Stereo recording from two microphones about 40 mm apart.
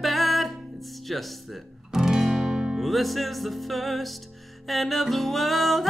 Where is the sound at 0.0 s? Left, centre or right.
Centre.